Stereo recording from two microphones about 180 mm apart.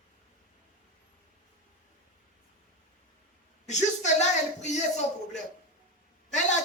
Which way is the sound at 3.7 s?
40° left (ahead or behind).